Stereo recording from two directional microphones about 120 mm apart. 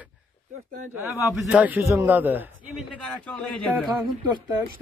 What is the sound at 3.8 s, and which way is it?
Speech, centre (ahead or behind).